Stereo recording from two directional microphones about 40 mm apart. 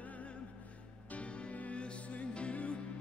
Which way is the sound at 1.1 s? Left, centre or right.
Left.